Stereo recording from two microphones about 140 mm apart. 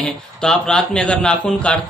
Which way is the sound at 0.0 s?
5° left (ahead or behind).